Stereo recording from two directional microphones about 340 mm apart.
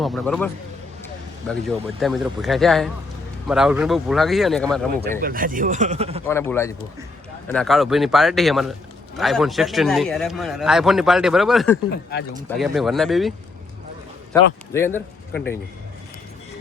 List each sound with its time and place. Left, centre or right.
0.0 s a man's voice: centre
5.2 s speech: right
6.2 s a man's voice: centre
14.3 s a man's voice: centre